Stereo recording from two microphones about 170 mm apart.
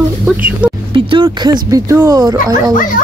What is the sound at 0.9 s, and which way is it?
Speech, 30° right (ahead or behind).